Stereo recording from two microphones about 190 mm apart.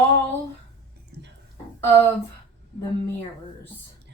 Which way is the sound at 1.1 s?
60° right (ahead or behind).